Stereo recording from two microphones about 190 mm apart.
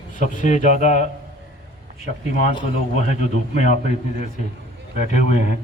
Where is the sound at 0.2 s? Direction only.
40° left (ahead or behind).